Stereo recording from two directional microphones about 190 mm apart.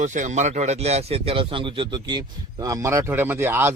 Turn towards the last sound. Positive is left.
turn(degrees=-10)  # may be behind; listen again after turning